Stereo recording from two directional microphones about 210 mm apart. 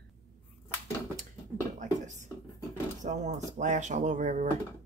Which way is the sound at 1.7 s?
35° right (ahead or behind).